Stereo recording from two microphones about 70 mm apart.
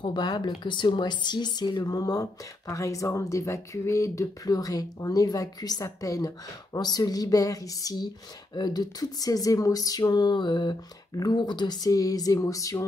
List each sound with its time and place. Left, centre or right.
0.1 s speech: left
5.9 s speech: left
12.4 s a sound: left